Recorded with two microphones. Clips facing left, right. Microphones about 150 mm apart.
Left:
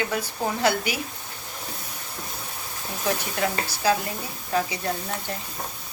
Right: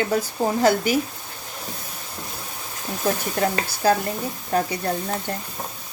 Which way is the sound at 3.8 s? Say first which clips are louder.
Right 4 dB; 50° right (ahead or behind).